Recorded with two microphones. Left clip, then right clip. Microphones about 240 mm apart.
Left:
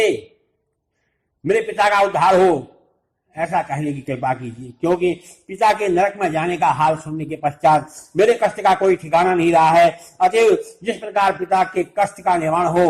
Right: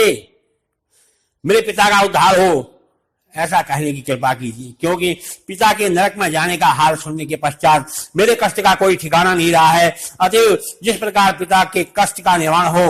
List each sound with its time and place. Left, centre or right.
1.5 s a man's voice: right